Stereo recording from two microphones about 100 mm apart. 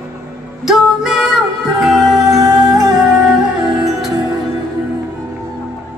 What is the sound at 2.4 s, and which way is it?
Music, 40° right (ahead or behind).